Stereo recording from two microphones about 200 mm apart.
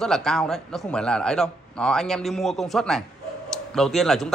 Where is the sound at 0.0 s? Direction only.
5° left (ahead or behind).